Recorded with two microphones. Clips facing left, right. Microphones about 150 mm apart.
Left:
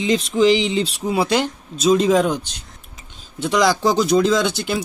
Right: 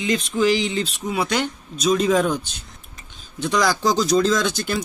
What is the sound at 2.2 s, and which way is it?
Speech, 15° left (ahead or behind).